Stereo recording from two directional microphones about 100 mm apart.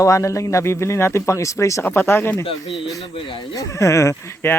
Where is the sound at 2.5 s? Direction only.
65° left (ahead or behind).